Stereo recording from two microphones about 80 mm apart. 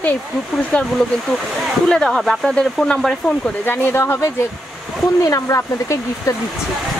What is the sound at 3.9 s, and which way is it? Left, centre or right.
Speech, left.